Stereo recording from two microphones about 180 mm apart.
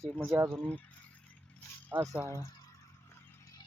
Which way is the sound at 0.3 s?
15° right (ahead or behind).